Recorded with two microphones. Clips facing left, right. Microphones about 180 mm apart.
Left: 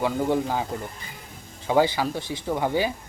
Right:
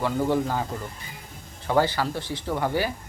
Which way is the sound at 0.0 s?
15° left (ahead or behind).